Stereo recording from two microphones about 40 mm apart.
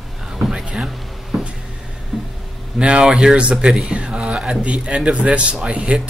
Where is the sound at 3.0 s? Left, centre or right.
Centre.